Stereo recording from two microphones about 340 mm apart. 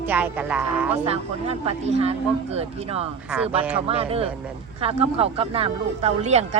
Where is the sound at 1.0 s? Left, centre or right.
Centre.